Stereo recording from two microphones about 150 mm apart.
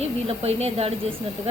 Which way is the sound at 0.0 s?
45° right (ahead or behind).